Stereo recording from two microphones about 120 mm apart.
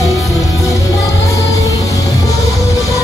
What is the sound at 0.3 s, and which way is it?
Music, 25° left (ahead or behind).